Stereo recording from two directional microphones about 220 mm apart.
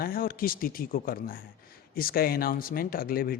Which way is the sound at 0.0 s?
40° left (ahead or behind).